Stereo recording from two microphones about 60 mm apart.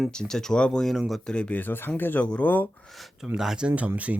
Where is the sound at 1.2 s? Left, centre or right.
Centre.